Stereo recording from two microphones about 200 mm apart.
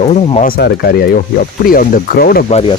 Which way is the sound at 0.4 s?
50° left (ahead or behind).